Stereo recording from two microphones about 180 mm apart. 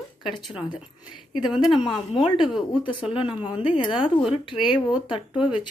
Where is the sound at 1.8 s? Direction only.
30° left (ahead or behind).